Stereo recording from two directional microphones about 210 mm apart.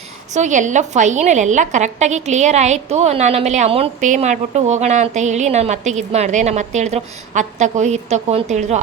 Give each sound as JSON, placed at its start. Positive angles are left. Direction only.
{"t": 0.3, "sound": "a woman's voice", "side_deg": -35}